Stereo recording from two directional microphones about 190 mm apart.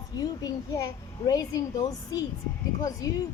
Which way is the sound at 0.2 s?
20° left (ahead or behind).